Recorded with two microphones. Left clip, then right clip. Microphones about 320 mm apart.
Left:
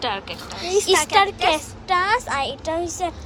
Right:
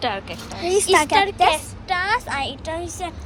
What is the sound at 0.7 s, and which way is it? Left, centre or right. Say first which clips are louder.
Speech: right 2 dB; right.